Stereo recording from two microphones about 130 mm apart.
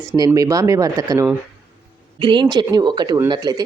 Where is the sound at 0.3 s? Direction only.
30° right (ahead or behind).